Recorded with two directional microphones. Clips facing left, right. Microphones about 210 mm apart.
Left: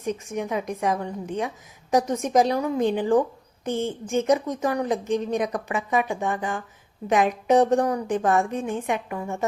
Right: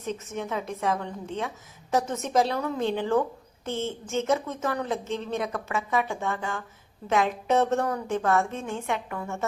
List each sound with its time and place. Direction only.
0.0 s a woman's voice: 15° left (ahead or behind)